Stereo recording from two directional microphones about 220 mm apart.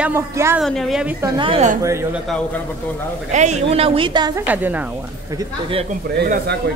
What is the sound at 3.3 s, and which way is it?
A woman's voice, 30° right (ahead or behind).